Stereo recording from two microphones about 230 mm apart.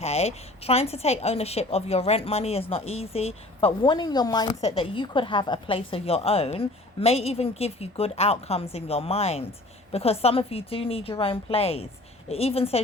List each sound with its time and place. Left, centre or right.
0.0 s a woman's voice: left